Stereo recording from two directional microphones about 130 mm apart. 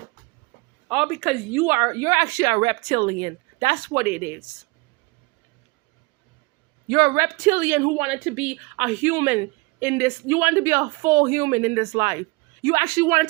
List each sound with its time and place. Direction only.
0.9 s a woman's voice: 5° right (ahead or behind)
1.6 s a woman's voice: 20° right (ahead or behind)
3.9 s a woman's voice: 15° right (ahead or behind)
6.8 s speech: 30° right (ahead or behind)
7.2 s a woman's voice: 20° right (ahead or behind)